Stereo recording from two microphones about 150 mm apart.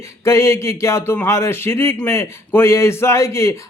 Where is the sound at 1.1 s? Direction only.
15° left (ahead or behind).